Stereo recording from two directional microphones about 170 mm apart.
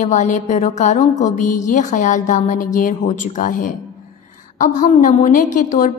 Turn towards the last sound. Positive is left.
turn(degrees=50)  # may be behind; listen again after turning